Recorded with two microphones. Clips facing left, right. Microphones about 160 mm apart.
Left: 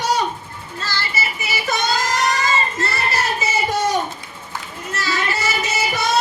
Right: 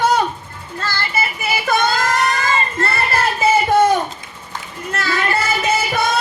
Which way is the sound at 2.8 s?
55° right (ahead or behind).